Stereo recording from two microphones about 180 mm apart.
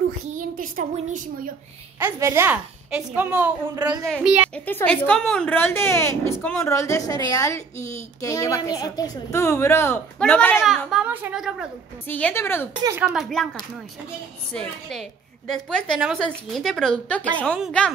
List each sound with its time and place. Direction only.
0.3 s speech: 50° right (ahead or behind)
2.0 s a woman's voice: 15° right (ahead or behind)
4.1 s a woman's voice: 5° right (ahead or behind)
4.6 s a woman's voice: 10° left (ahead or behind)
12.1 s a woman's voice: 10° left (ahead or behind)
12.7 s speech: 20° right (ahead or behind)
13.0 s a woman's voice: centre (ahead or behind)
14.5 s a woman's voice: 5° left (ahead or behind)